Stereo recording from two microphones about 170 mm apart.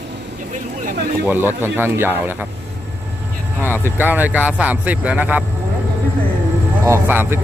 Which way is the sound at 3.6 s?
10° left (ahead or behind).